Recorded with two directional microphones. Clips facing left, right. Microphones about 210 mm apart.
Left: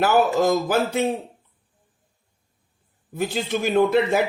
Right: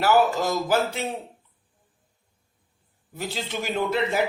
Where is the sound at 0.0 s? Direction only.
55° left (ahead or behind).